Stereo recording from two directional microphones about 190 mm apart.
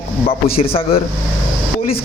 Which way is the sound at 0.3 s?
30° left (ahead or behind).